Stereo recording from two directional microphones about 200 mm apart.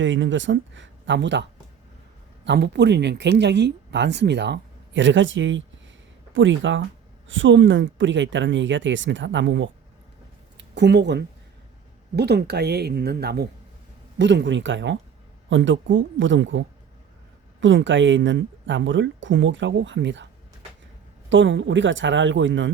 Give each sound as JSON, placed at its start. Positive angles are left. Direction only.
{"t": 0.0, "sound": "speech", "side_deg": -65}
{"t": 14.2, "sound": "speech", "side_deg": -65}
{"t": 21.2, "sound": "speech", "side_deg": -65}